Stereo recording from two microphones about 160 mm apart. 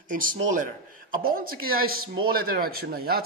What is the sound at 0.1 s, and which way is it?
Speech, 60° right (ahead or behind).